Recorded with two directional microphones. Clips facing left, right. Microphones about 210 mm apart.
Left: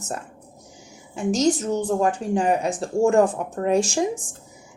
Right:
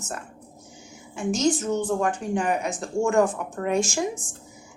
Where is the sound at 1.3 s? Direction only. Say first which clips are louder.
Left 2 dB; 35° left (ahead or behind).